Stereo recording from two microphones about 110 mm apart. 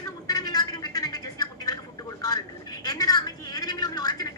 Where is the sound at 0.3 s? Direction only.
35° left (ahead or behind).